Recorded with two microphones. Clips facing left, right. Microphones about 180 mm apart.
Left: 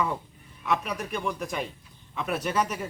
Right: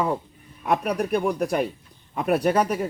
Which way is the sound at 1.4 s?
65° right (ahead or behind).